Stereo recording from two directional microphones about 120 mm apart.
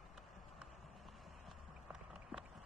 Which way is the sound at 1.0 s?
Centre (ahead or behind).